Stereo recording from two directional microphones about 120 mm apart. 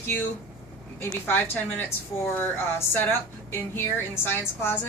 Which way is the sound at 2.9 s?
15° left (ahead or behind).